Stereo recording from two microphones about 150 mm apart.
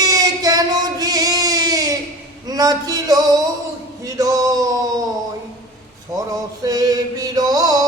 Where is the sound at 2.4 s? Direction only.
25° right (ahead or behind).